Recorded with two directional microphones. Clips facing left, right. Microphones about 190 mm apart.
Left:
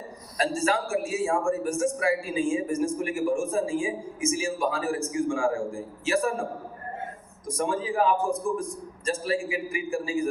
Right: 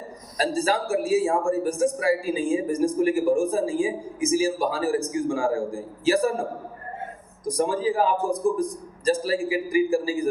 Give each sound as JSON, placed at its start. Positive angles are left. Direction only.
{"t": 0.3, "sound": "a man's voice", "side_deg": -35}
{"t": 7.4, "sound": "a man's voice", "side_deg": -35}